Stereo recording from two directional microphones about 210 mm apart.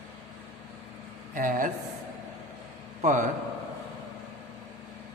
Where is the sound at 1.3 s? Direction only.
40° right (ahead or behind).